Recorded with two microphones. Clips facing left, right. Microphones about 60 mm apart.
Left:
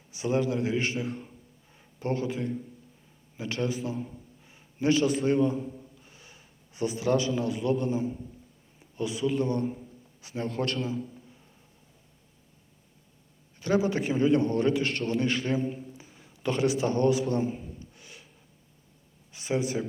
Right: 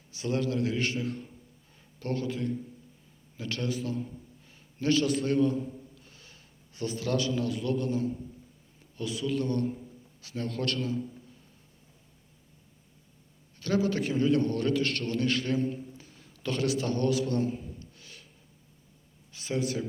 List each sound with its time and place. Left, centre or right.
0.1 s a man's voice: centre
10.7 s a man's voice: centre
13.6 s a man's voice: centre
19.3 s a sound: centre